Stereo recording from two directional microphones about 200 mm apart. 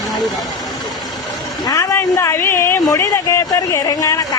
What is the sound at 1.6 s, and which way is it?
Speech, 15° left (ahead or behind).